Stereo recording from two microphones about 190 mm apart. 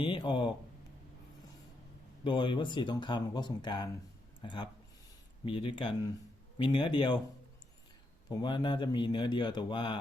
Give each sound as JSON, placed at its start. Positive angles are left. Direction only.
{"t": 0.0, "sound": "speech", "side_deg": 25}
{"t": 2.2, "sound": "a man's voice", "side_deg": 25}
{"t": 8.4, "sound": "a man's voice", "side_deg": 25}